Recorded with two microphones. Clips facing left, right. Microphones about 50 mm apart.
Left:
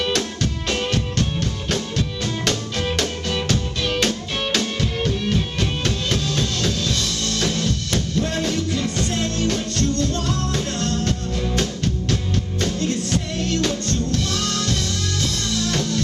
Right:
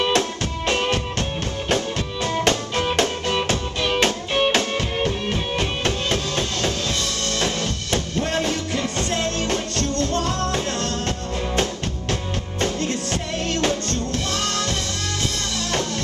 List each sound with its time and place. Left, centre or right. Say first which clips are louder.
0.0 s music: right 2 dB; right